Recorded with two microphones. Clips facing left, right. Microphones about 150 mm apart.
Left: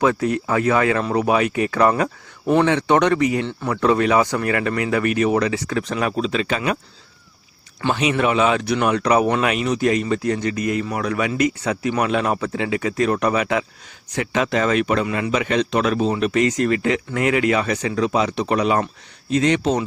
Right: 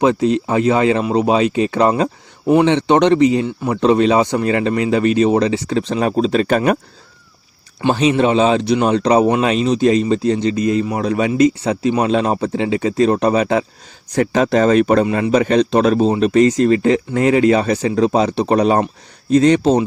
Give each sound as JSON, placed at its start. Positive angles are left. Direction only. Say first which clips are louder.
{"t": 0.0, "sound": "speech", "louder": "right 4 dB", "side_deg": -20}
{"t": 7.9, "sound": "a man's voice", "louder": "right 5 dB", "side_deg": -30}